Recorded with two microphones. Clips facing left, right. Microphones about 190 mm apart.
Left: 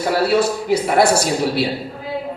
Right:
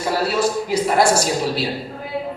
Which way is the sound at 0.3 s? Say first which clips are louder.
Left 2 dB; 65° left (ahead or behind).